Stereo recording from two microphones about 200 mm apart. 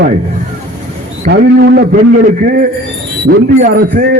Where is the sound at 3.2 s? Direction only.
40° right (ahead or behind).